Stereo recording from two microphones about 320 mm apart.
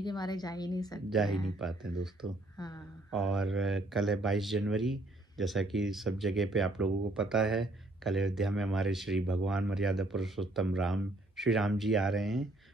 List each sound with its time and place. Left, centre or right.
0.0 s a woman's voice: centre
1.1 s speech: centre
2.5 s speech: centre
3.2 s speech: centre